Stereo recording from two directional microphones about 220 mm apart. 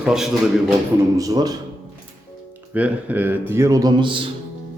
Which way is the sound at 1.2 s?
15° right (ahead or behind).